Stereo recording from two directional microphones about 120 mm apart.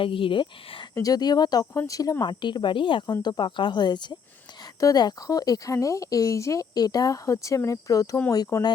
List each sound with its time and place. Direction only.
0.0 s speech: 45° left (ahead or behind)
0.9 s speech: 30° left (ahead or behind)